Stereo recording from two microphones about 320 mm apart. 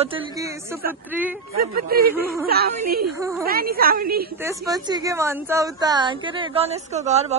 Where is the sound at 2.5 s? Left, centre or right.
Right.